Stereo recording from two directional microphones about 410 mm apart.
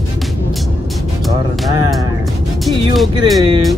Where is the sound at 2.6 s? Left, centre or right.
Centre.